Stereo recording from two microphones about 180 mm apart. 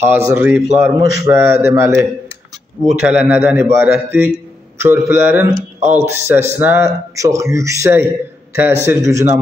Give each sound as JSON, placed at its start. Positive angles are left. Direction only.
{"t": 0.0, "sound": "speech", "side_deg": -15}
{"t": 5.8, "sound": "speech", "side_deg": -40}
{"t": 6.0, "sound": "speech", "side_deg": -15}